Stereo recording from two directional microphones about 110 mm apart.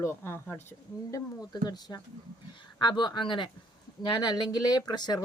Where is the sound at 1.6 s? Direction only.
35° left (ahead or behind).